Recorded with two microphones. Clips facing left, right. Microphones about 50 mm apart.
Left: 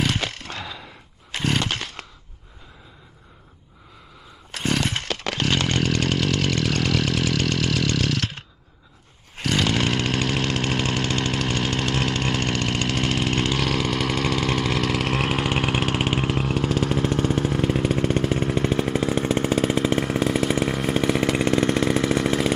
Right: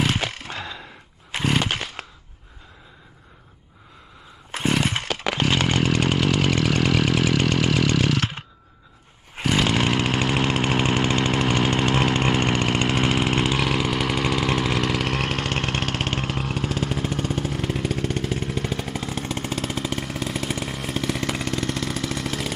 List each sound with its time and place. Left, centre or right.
0.0 s a sound: centre
4.5 s chainsaw: centre
17.3 s a sound: centre
20.2 s chainsaw: centre
20.8 s chainsaw: centre
21.4 s vehicle: left